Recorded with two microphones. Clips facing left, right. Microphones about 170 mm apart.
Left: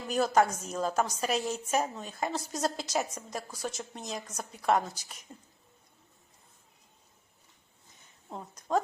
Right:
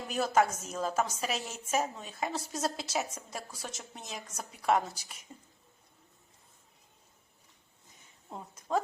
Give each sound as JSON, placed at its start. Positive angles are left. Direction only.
{"t": 0.1, "sound": "a woman's voice", "side_deg": -5}
{"t": 8.3, "sound": "a woman's voice", "side_deg": 0}